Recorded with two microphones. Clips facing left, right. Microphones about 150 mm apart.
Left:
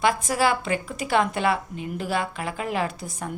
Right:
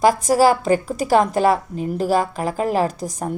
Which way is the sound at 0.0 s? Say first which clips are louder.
Right 7 dB; 40° right (ahead or behind).